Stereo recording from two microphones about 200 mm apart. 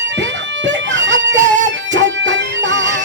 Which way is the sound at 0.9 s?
65° right (ahead or behind).